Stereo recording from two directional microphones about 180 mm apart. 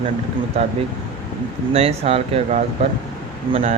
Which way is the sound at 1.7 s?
35° right (ahead or behind).